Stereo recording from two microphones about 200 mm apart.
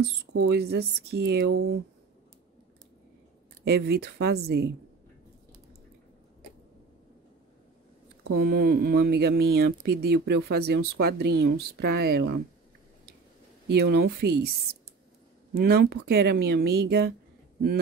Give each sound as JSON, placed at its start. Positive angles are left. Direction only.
{"t": 0.3, "sound": "speech", "side_deg": -55}
{"t": 3.6, "sound": "speech", "side_deg": -55}
{"t": 8.3, "sound": "speech", "side_deg": -50}
{"t": 13.7, "sound": "speech", "side_deg": -55}